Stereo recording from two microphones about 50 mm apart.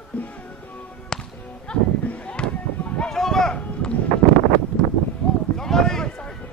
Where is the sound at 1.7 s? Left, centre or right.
Centre.